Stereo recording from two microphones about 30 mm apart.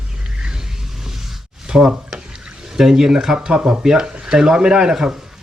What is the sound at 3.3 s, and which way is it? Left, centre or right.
A man's voice, right.